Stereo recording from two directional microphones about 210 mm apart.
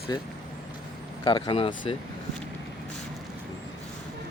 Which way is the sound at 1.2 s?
20° left (ahead or behind).